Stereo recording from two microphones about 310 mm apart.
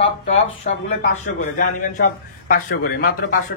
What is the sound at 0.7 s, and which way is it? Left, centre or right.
A man's voice, left.